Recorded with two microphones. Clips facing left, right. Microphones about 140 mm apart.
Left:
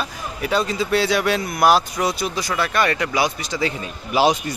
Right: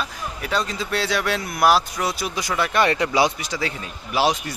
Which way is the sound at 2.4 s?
15° right (ahead or behind).